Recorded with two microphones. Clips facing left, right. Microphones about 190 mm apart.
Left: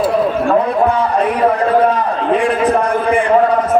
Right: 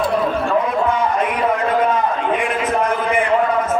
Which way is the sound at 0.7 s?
35° left (ahead or behind).